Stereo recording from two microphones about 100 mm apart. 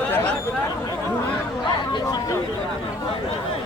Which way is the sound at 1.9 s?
40° left (ahead or behind).